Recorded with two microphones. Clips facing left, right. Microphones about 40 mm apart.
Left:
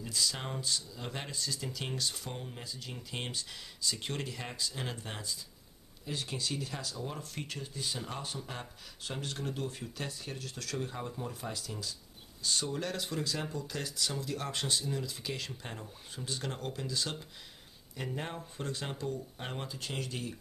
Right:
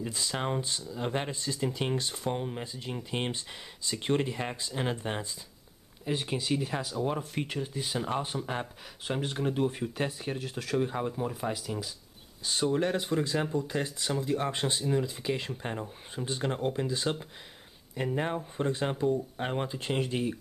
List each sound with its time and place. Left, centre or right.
0.0 s speech: right